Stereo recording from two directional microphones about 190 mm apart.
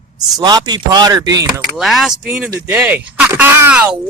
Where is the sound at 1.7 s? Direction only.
Centre (ahead or behind).